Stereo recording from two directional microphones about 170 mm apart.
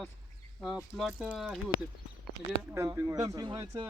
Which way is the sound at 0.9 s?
Centre (ahead or behind).